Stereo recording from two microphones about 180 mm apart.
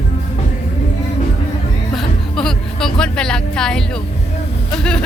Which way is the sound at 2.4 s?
Centre (ahead or behind).